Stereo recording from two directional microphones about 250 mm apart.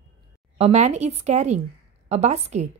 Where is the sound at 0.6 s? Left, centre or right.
Right.